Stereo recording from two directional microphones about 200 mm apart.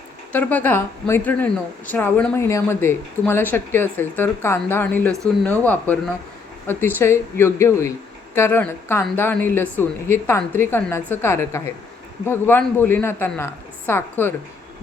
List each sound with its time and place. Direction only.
0.3 s a woman's voice: 10° left (ahead or behind)